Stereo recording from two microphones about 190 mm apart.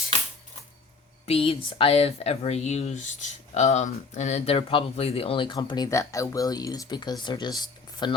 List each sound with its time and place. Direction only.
1.3 s speech: 30° left (ahead or behind)